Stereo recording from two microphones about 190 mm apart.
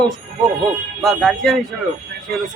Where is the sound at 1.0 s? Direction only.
Centre (ahead or behind).